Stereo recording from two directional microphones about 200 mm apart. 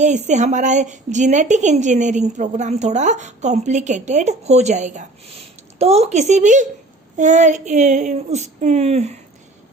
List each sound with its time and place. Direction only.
0.0 s a woman's voice: 35° right (ahead or behind)